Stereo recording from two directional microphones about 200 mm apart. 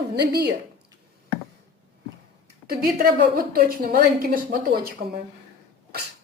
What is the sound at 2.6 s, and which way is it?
A woman's voice, 45° right (ahead or behind).